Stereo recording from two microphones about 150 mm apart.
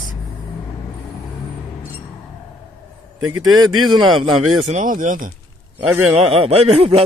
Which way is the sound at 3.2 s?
25° right (ahead or behind).